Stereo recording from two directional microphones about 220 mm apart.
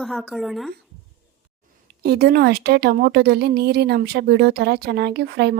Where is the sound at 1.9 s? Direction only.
45° right (ahead or behind).